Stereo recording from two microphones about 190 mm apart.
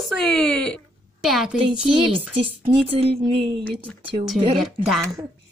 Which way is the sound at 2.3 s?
30° right (ahead or behind).